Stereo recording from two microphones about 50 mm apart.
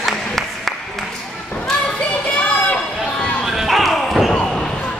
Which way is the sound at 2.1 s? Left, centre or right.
Left.